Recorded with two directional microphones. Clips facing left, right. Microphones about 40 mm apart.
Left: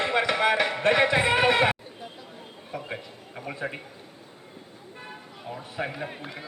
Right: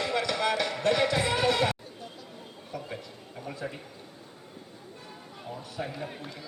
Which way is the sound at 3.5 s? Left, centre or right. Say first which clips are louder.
Left 5 dB; left.